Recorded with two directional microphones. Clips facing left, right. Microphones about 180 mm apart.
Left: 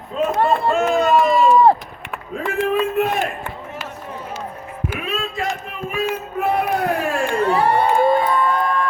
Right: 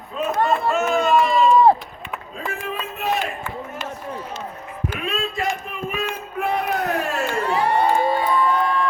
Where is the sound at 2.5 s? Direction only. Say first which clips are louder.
Left 12 dB; 55° left (ahead or behind).